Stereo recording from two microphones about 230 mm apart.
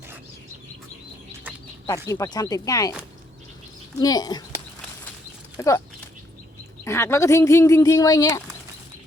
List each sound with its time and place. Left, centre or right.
2.0 s speech: centre
4.0 s speech: centre
5.5 s speech: centre
6.8 s speech: centre